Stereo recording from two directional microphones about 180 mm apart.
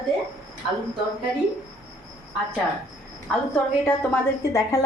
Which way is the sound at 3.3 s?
5° left (ahead or behind).